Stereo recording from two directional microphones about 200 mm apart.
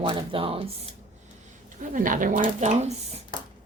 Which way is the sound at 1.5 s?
40° right (ahead or behind).